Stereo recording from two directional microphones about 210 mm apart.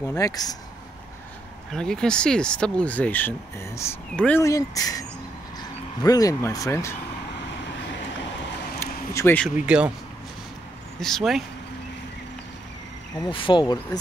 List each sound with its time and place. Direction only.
0.0 s speech: 15° left (ahead or behind)
1.7 s speech: 5° left (ahead or behind)
8.7 s a sound: 10° left (ahead or behind)
9.7 s speech: 5° right (ahead or behind)
11.0 s speech: centre (ahead or behind)
13.2 s speech: 25° left (ahead or behind)